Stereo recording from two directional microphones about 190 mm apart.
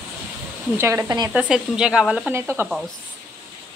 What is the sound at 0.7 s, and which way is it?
Speech, 15° right (ahead or behind).